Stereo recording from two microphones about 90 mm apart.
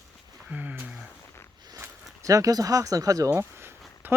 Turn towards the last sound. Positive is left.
turn(degrees=-25)  # may be behind; listen again after turning